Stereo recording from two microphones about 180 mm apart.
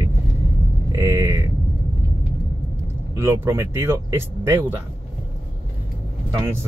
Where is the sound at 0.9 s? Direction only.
15° right (ahead or behind).